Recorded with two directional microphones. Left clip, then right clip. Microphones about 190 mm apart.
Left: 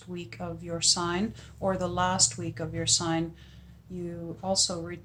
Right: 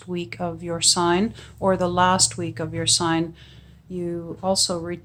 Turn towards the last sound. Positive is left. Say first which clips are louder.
# right 5 dB
turn(degrees=-40)  # may be behind; listen again after turning